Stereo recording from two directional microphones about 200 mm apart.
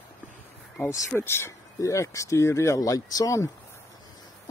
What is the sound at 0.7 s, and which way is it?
Speech, 15° left (ahead or behind).